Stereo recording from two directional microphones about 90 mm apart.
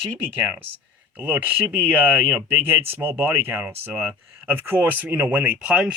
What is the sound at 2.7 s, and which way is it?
Speech, 25° right (ahead or behind).